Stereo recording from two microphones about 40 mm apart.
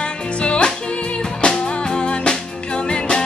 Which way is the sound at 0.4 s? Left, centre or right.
Left.